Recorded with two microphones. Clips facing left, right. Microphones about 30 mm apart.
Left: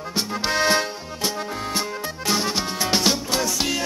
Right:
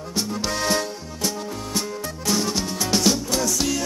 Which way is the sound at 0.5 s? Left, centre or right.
Left.